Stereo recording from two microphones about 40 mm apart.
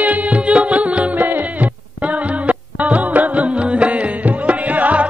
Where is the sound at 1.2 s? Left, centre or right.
Right.